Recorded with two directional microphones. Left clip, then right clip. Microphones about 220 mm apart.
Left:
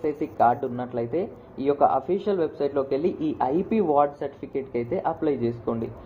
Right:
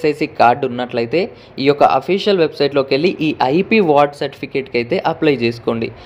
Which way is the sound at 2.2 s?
65° right (ahead or behind).